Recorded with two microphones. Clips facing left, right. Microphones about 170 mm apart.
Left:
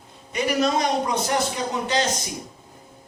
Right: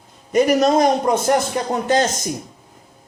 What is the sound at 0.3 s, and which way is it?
A man's voice, 45° right (ahead or behind).